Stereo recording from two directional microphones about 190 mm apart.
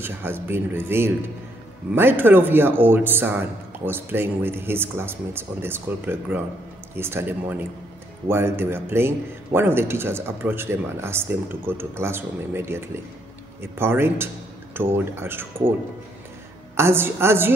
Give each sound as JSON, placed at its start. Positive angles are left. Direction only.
{"t": 0.0, "sound": "a man's voice", "side_deg": -10}
{"t": 16.7, "sound": "a man's voice", "side_deg": -10}